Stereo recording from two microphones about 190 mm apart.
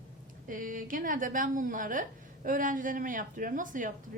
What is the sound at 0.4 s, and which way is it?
A woman's voice, 45° right (ahead or behind).